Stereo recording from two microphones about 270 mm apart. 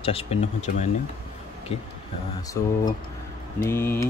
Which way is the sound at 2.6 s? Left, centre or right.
Centre.